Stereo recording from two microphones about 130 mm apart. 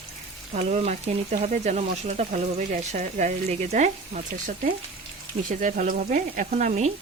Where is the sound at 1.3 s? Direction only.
80° right; by 6.9 s 60° right (ahead or behind).